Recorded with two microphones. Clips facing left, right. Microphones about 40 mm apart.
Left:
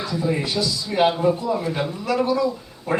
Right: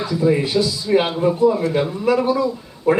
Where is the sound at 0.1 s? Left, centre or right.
Centre.